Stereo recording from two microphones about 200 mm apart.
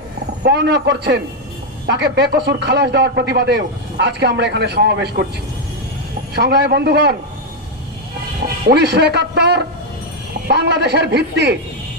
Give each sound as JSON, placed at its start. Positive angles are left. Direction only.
{"t": 0.4, "sound": "speech", "side_deg": -60}
{"t": 6.3, "sound": "speech", "side_deg": -55}
{"t": 8.6, "sound": "speech", "side_deg": -55}